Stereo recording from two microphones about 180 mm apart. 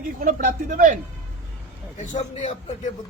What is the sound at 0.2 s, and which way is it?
Speech, 45° right (ahead or behind).